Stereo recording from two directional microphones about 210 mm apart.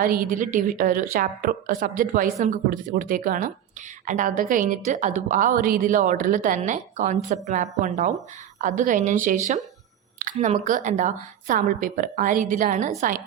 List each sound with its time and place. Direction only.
0.0 s a woman's voice: 40° right (ahead or behind)